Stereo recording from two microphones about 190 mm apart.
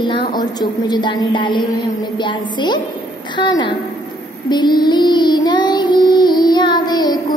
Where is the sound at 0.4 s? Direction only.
20° left (ahead or behind).